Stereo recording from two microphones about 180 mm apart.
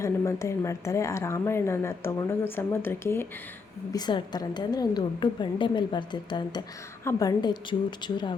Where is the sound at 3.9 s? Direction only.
25° left (ahead or behind).